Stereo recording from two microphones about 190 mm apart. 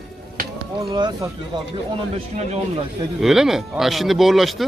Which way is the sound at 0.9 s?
20° right (ahead or behind).